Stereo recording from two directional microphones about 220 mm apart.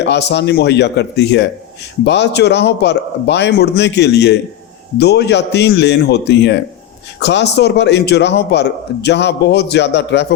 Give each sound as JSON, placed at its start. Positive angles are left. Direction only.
{"t": 0.0, "sound": "a man's voice", "side_deg": 50}